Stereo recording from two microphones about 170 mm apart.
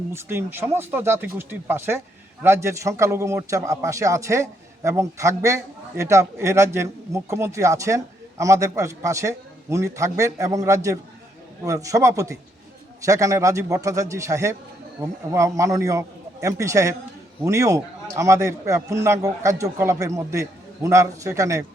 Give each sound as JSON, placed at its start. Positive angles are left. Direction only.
{"t": 0.1, "sound": "a man's voice", "side_deg": -15}